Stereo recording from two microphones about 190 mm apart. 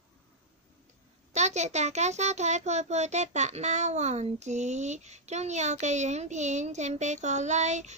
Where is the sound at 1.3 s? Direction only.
35° right (ahead or behind).